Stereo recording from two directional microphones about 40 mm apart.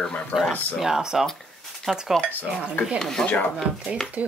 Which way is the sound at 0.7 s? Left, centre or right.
Centre.